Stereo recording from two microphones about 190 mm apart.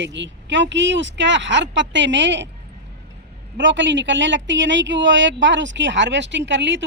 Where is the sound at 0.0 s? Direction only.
70° right (ahead or behind).